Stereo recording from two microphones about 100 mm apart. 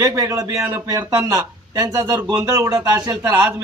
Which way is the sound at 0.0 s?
35° right (ahead or behind).